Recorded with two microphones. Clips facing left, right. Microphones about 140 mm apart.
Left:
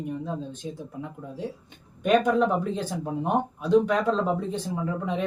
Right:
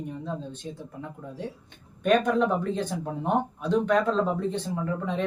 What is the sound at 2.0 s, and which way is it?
Speech, 10° left (ahead or behind).